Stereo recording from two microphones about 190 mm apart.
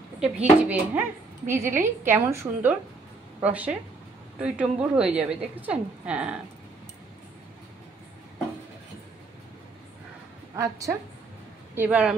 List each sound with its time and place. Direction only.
0.2 s a woman's voice: 10° right (ahead or behind)
10.5 s a woman's voice: 15° right (ahead or behind)